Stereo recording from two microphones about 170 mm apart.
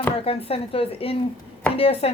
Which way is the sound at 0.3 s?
35° left (ahead or behind).